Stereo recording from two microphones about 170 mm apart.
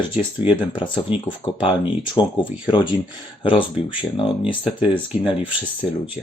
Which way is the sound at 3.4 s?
30° left (ahead or behind).